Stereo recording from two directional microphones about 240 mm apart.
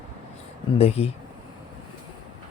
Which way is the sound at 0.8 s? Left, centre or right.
Left.